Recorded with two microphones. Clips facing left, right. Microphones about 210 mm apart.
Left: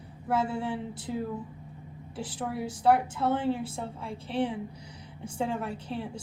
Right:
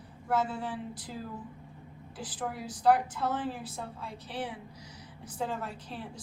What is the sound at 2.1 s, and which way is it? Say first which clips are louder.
A woman's voice: left 4 dB; 25° left (ahead or behind).